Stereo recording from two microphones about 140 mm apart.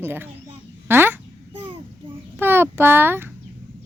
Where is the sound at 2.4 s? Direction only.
15° right (ahead or behind).